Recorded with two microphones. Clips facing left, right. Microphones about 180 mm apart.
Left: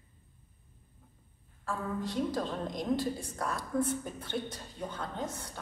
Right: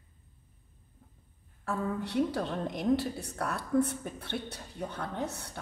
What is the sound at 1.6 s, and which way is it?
A woman's voice, 65° right (ahead or behind).